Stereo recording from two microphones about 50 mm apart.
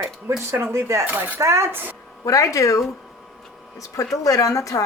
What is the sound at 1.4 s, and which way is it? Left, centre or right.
Speech, right.